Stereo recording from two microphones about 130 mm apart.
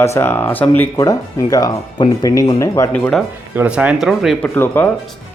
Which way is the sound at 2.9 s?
10° left (ahead or behind).